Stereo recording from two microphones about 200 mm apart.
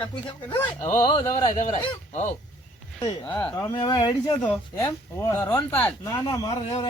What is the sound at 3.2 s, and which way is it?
Speech, 10° left (ahead or behind).